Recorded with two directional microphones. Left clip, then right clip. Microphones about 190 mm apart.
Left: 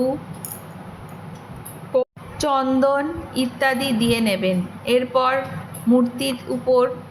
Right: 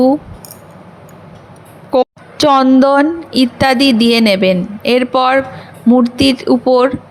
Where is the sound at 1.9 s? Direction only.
50° right (ahead or behind).